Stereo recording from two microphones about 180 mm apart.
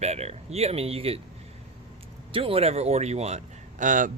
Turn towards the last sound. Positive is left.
turn(degrees=-45)  # may be behind; listen again after turning